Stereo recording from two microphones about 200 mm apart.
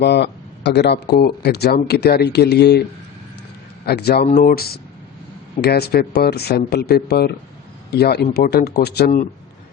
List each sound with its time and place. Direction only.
0.0 s speech: 55° left (ahead or behind)
3.8 s speech: 55° left (ahead or behind)